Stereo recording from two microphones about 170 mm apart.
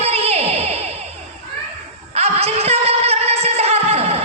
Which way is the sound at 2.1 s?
35° right (ahead or behind).